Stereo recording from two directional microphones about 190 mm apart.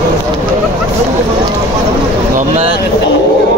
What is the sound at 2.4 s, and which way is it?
Vehicle, 35° right (ahead or behind).